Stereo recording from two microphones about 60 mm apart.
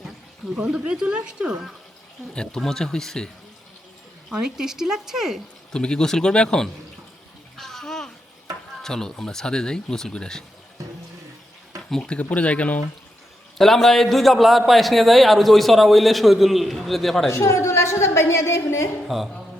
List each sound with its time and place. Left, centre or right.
0.6 s speech: centre
2.3 s speech: centre
4.3 s speech: centre
5.7 s speech: centre
7.5 s bathtub: centre
8.8 s speech: centre
11.8 s speech: centre
13.6 s a man's voice: centre
17.2 s a woman's voice: left
19.0 s a man's voice: centre